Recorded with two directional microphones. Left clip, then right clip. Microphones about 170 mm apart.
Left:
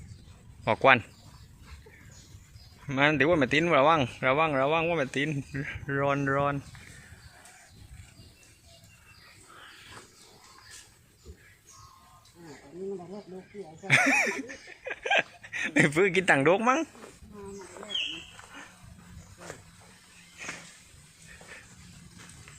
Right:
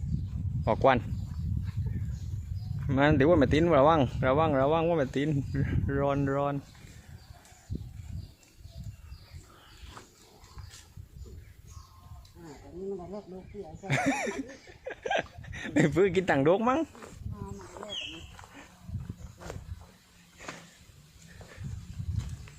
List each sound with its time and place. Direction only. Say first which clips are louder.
0.6 s speech: left 3 dB; 20° right (ahead or behind)
2.9 s speech: even; 35° right (ahead or behind); by 6.6 s 5° right (ahead or behind)
13.8 s laughter: left 7 dB; 20° right (ahead or behind)
17.8 s bird: right 4 dB; 5° right (ahead or behind)